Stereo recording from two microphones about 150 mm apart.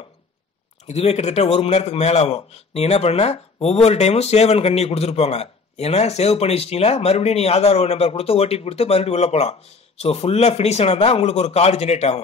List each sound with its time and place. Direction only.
0.8 s a man's voice: 45° left (ahead or behind)